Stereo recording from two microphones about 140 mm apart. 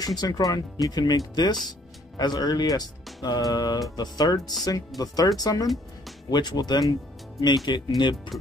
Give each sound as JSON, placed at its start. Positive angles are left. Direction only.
{"t": 0.0, "sound": "speech", "side_deg": 25}